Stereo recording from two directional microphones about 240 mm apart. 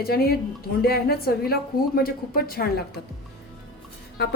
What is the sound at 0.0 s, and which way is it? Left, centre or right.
Speech, left.